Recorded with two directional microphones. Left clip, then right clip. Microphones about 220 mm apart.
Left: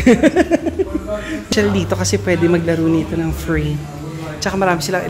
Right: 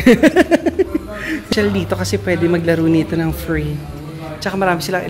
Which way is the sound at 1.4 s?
Centre (ahead or behind).